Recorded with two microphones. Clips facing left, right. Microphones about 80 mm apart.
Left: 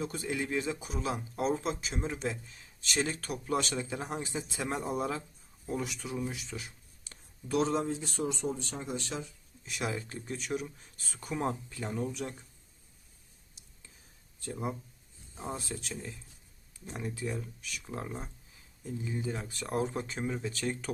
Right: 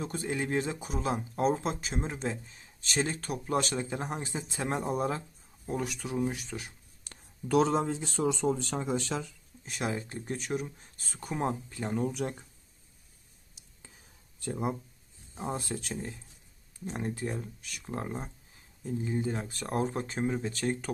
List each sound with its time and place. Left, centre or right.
0.0 s speech: right
5.6 s speech: right
7.0 s speech: right
9.6 s speech: right
10.2 s speech: right
12.1 s speech: right
13.8 s whispering: right
14.5 s speech: right
17.0 s speech: right